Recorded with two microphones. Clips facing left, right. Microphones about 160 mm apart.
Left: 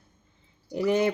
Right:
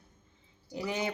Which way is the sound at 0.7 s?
60° left (ahead or behind).